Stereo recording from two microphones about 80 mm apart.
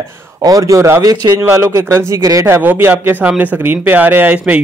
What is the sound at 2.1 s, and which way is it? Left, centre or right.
Speech, right.